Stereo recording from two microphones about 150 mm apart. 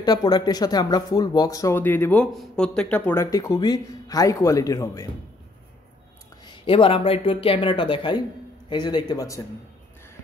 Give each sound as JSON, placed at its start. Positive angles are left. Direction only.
{"t": 0.0, "sound": "speech", "side_deg": 25}
{"t": 3.3, "sound": "speech", "side_deg": 25}
{"t": 6.4, "sound": "speech", "side_deg": 35}